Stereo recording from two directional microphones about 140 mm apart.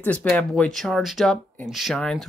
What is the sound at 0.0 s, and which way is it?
Speech, 10° left (ahead or behind).